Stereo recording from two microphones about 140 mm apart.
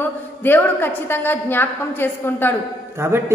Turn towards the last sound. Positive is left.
turn(degrees=-20)  # may be behind; listen again after turning